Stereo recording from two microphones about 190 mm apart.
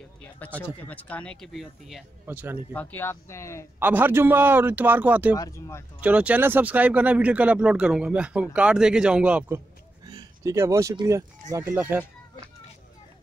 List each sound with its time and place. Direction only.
0.2 s a sound: 10° left (ahead or behind)
0.8 s speech: 10° left (ahead or behind); by 2.6 s 10° right (ahead or behind)
2.7 s speech: 10° left (ahead or behind)
3.8 s speech: 10° right (ahead or behind)
5.3 s speech: 15° left (ahead or behind)
5.9 s speech: 5° right (ahead or behind)
10.0 s speech: 20° right (ahead or behind)